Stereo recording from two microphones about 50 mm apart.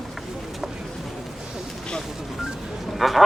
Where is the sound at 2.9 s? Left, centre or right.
Centre.